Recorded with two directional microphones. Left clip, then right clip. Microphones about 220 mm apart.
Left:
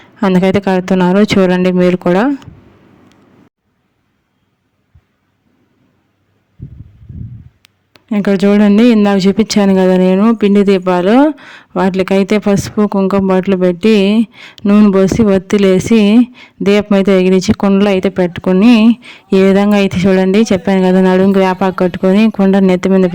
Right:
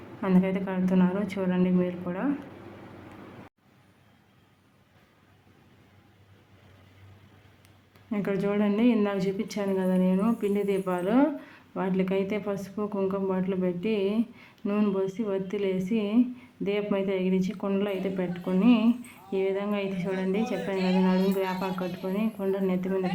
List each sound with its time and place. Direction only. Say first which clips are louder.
0.2 s speech: left 16 dB; 45° left (ahead or behind)
7.6 s speech: left 11 dB; 40° left (ahead or behind)